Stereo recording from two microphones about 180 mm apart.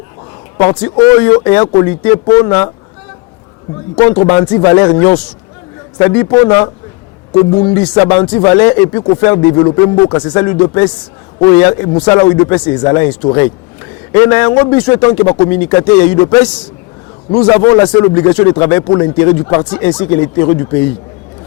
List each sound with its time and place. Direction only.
0.5 s speech: 20° left (ahead or behind)
3.9 s speech: 25° left (ahead or behind)